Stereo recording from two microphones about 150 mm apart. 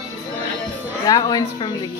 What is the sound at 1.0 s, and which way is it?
Speech, 25° left (ahead or behind).